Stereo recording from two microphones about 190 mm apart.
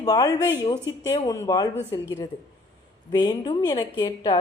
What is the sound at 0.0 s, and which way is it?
Speech, 20° left (ahead or behind).